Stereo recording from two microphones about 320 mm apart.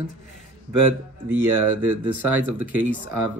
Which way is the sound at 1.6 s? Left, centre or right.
Right.